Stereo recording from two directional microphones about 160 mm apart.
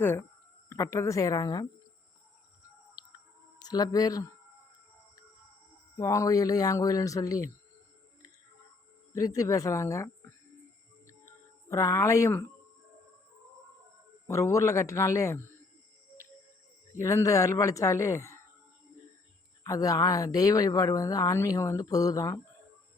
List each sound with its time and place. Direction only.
0.7 s speech: 20° left (ahead or behind)
3.6 s speech: 25° left (ahead or behind)
6.0 s speech: 20° left (ahead or behind)
9.1 s speech: 20° left (ahead or behind)
11.0 s music: 15° left (ahead or behind)
14.3 s speech: 20° left (ahead or behind)
17.0 s speech: 20° left (ahead or behind)
19.6 s speech: 20° left (ahead or behind)